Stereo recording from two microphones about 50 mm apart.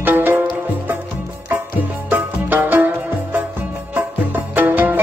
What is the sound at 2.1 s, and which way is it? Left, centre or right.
Music, right.